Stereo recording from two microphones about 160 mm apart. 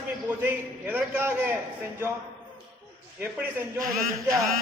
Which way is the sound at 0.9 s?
15° right (ahead or behind).